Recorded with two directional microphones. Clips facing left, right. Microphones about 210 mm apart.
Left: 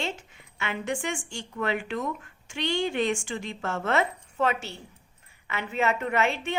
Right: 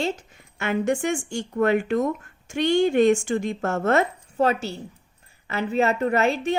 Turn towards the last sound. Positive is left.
turn(degrees=-40)  # may be behind; listen again after turning